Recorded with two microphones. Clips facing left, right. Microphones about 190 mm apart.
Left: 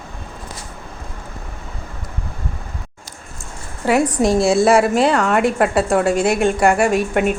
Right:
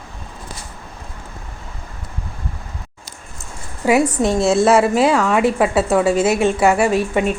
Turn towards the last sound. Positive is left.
turn(degrees=0)  # may be behind; listen again after turning